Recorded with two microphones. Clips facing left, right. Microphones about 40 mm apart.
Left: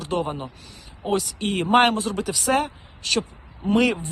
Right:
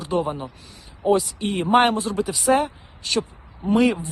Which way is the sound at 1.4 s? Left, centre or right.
Left.